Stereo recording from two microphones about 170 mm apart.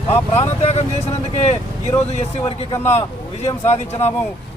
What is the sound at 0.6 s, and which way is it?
Speech, 40° left (ahead or behind).